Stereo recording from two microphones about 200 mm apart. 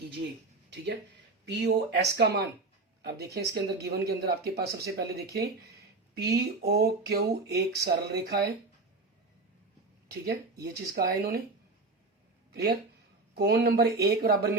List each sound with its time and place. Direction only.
1.5 s speech: 60° right (ahead or behind)
10.1 s speech: 50° right (ahead or behind)
12.5 s speech: 50° right (ahead or behind)